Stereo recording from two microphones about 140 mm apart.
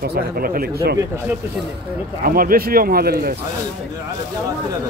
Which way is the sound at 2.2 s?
90° right.